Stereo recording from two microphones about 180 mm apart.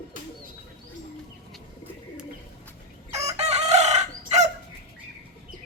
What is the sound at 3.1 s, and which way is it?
Chicken, 35° right (ahead or behind).